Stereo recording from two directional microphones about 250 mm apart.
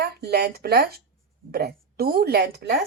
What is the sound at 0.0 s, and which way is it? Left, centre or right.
Speech, right.